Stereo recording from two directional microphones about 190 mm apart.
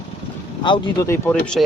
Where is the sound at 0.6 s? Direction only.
25° left (ahead or behind).